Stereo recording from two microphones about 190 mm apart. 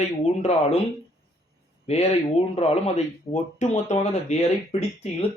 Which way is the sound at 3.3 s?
15° left (ahead or behind).